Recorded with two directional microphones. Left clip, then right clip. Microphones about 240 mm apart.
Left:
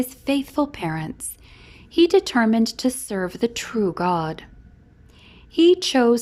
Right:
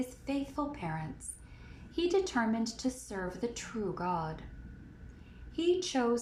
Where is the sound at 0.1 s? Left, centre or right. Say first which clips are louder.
Left 13 dB; left.